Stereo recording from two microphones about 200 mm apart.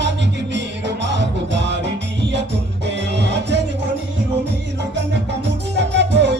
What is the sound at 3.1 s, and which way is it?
Music, 60° right (ahead or behind).